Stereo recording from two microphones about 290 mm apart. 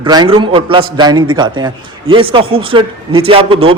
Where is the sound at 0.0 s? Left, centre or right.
Centre.